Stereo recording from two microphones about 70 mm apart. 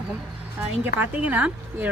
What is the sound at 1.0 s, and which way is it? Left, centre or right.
Speech, right.